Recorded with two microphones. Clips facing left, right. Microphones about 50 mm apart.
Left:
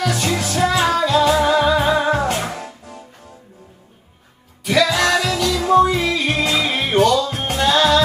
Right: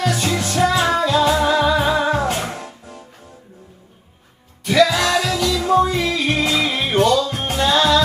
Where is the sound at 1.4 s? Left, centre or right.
Left.